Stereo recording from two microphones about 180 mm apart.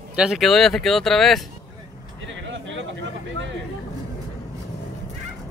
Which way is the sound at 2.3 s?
90° right.